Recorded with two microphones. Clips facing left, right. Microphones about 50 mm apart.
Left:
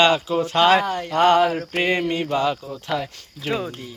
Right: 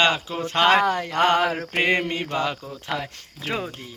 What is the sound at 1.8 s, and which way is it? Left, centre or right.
Mantra, right.